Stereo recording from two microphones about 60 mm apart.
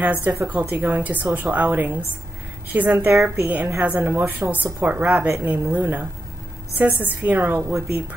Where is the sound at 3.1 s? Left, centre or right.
Right.